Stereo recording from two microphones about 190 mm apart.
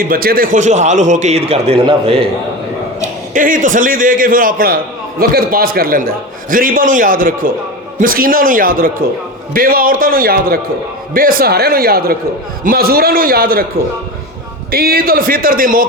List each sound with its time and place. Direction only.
0.0 s a man's voice: 50° right (ahead or behind); by 2.2 s 25° right (ahead or behind)
3.0 s a man's voice: 45° right (ahead or behind)
14.7 s a man's voice: 55° right (ahead or behind)